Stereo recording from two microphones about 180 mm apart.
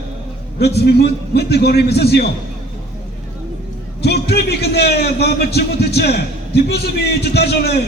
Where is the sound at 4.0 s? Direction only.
65° left (ahead or behind).